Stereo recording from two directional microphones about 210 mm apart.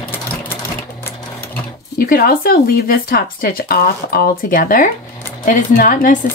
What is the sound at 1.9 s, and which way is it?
Speech, 45° left (ahead or behind).